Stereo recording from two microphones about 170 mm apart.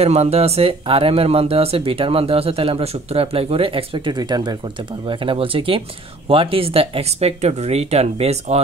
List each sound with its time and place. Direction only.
0.0 s speech: 40° right (ahead or behind)